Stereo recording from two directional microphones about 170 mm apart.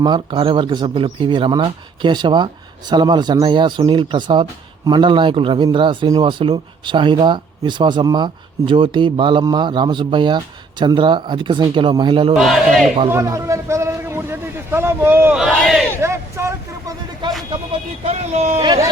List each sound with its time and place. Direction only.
0.0 s speech: 25° right (ahead or behind)
12.4 s speech: centre (ahead or behind)
13.1 s a man's voice: 15° right (ahead or behind)
15.4 s speech: centre (ahead or behind)
16.0 s a sound: 15° right (ahead or behind)
17.5 s speech: 35° right (ahead or behind)
18.6 s speech: 25° right (ahead or behind)